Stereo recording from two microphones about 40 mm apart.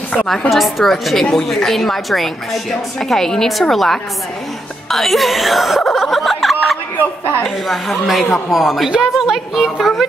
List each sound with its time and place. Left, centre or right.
0.5 s a woman's voice: centre
4.8 s music: centre
7.4 s speech: centre
8.9 s a woman's voice: right
9.3 s speech: centre